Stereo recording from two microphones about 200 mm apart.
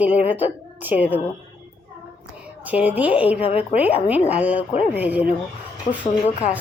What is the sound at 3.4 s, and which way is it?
Speech, 30° left (ahead or behind).